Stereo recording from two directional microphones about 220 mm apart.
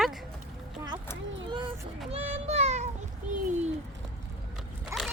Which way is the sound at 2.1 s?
25° right (ahead or behind).